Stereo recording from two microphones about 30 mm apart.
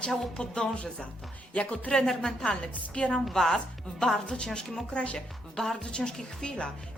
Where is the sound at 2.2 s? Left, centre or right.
Left.